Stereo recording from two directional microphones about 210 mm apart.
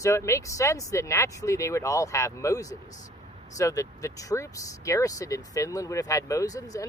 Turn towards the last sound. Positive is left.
turn(degrees=15)  # may be behind; listen again after turning